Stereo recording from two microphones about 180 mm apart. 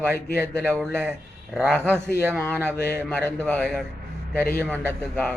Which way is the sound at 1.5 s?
5° left (ahead or behind).